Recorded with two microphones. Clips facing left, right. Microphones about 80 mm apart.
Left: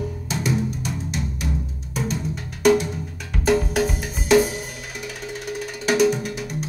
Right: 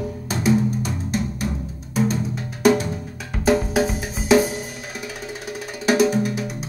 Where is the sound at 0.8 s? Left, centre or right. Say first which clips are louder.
Right 3 dB; right.